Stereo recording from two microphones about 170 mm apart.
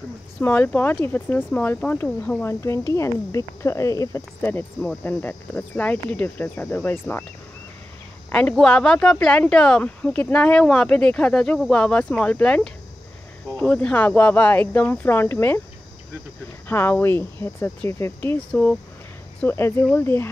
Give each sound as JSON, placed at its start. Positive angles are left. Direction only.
{"t": 0.4, "sound": "speech", "side_deg": 10}
{"t": 8.3, "sound": "speech", "side_deg": 5}
{"t": 16.6, "sound": "speech", "side_deg": 10}